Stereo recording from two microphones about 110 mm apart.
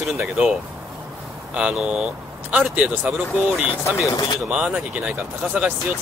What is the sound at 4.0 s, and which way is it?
Speech, 30° left (ahead or behind).